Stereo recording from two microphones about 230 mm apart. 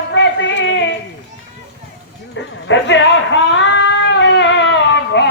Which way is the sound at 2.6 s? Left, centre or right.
Left.